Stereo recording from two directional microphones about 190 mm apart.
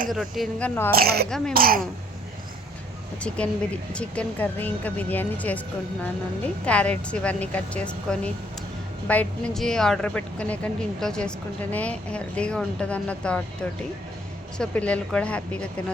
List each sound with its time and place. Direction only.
0.1 s a woman's voice: centre (ahead or behind)
0.9 s speech: 55° right (ahead or behind)
3.2 s a woman's voice: 5° left (ahead or behind)